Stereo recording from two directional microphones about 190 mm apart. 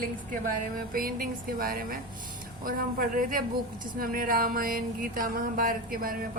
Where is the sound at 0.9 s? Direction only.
50° right (ahead or behind).